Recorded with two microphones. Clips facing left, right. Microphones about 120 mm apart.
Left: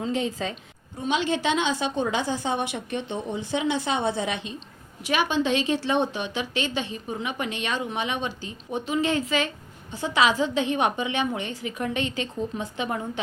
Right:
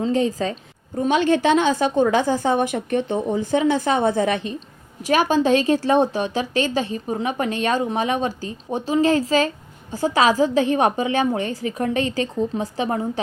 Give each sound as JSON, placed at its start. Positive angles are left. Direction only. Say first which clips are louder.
{"t": 0.0, "sound": "a woman's voice", "louder": "right 7 dB", "side_deg": -40}
{"t": 0.9, "sound": "a woman's voice", "louder": "right 7 dB", "side_deg": -50}